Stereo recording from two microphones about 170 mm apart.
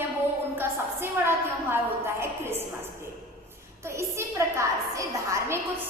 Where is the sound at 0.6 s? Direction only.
15° right (ahead or behind).